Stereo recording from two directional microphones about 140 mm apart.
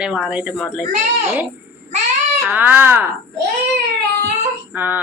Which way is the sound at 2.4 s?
10° right (ahead or behind).